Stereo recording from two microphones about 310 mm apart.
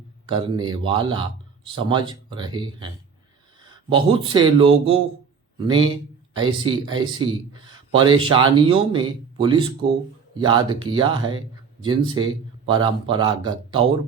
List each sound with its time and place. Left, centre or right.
0.3 s speech: centre